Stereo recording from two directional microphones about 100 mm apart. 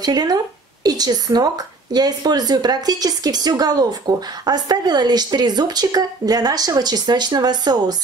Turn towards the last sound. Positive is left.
turn(degrees=-45)  # may be behind; listen again after turning